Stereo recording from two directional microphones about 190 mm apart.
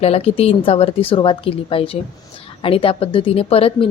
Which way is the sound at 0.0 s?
30° left (ahead or behind).